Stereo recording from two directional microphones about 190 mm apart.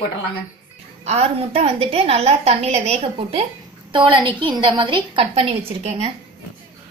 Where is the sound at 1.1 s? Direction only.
30° right (ahead or behind).